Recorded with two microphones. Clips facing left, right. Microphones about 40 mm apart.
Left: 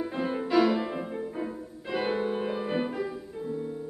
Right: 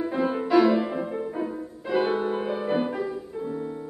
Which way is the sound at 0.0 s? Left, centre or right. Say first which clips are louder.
Right 5 dB; centre.